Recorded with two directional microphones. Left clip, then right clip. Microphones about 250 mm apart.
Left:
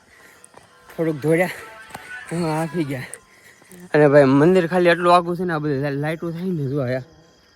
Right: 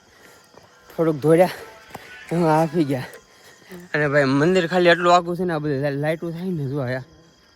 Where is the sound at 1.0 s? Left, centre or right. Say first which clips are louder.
Right 3 dB; centre.